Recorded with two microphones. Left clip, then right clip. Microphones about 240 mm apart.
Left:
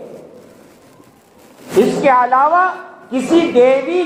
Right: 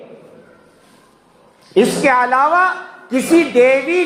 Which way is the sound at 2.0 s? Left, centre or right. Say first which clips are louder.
Left 3 dB; right.